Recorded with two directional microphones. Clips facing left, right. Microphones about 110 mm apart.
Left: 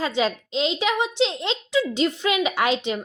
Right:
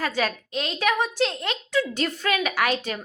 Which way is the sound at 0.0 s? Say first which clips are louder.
Left 3 dB; 20° left (ahead or behind).